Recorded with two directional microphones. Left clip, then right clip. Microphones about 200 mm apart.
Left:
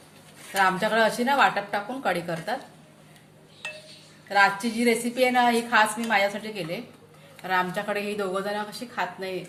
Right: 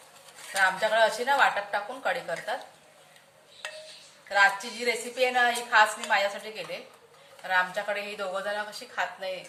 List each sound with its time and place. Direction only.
0.5 s a woman's voice: 30° left (ahead or behind)
4.3 s a woman's voice: 30° left (ahead or behind)